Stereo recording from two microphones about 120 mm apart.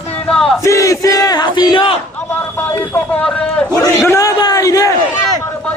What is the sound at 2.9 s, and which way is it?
Speech, 10° left (ahead or behind).